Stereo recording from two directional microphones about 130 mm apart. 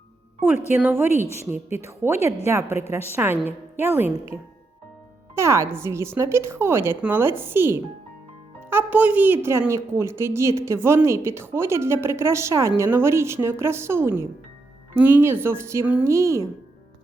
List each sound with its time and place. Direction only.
0.4 s a woman's voice: 15° right (ahead or behind)
2.6 s a woman's voice: 55° left (ahead or behind)
2.9 s a woman's voice: 15° right (ahead or behind)
5.3 s a woman's voice: 20° right (ahead or behind)